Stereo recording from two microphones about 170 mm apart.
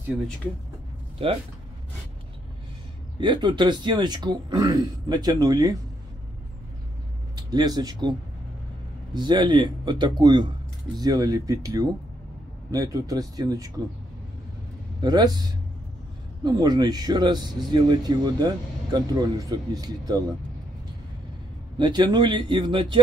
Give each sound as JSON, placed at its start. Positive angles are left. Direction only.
{"t": 1.1, "sound": "speech", "side_deg": -35}
{"t": 3.2, "sound": "speech", "side_deg": -25}
{"t": 7.3, "sound": "speech", "side_deg": -25}
{"t": 9.1, "sound": "speech", "side_deg": -25}
{"t": 15.0, "sound": "speech", "side_deg": -25}
{"t": 16.4, "sound": "speech", "side_deg": -25}
{"t": 21.7, "sound": "speech", "side_deg": -25}